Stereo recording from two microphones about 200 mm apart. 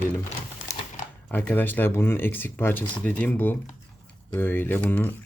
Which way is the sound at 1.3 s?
10° left (ahead or behind).